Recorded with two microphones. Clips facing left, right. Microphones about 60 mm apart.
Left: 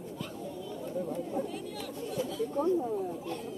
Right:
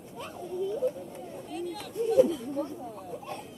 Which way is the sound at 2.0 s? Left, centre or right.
Right.